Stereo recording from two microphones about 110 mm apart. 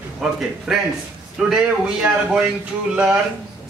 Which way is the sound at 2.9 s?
10° right (ahead or behind).